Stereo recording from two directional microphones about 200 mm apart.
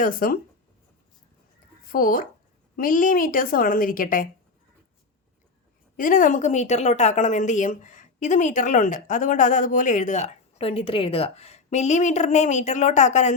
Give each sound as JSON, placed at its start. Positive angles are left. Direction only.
{"t": 0.0, "sound": "a woman's voice", "side_deg": 45}
{"t": 1.9, "sound": "a woman's voice", "side_deg": 45}
{"t": 6.0, "sound": "a woman's voice", "side_deg": 40}